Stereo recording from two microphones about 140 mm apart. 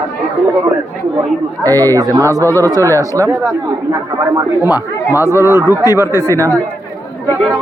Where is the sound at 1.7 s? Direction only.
25° right (ahead or behind).